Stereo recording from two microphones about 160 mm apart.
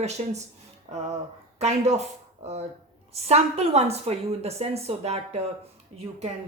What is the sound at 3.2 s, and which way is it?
A woman's voice, 40° right (ahead or behind).